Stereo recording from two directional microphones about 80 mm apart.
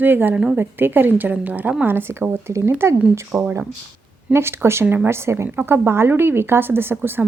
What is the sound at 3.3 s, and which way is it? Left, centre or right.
Speech, centre.